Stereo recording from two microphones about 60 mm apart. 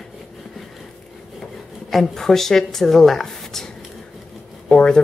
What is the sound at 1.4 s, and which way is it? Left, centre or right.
Speech, centre.